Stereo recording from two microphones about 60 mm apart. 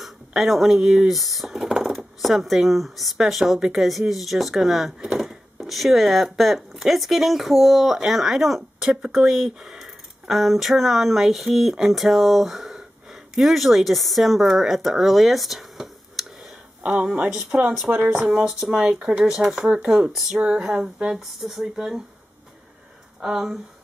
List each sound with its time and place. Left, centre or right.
0.0 s speech: centre
16.8 s speech: centre
17.6 s speech: right
18.1 s speech: centre
18.9 s speech: right
19.2 s speech: centre
23.2 s speech: centre